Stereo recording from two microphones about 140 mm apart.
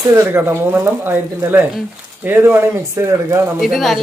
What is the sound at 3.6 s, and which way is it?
Speech, centre (ahead or behind).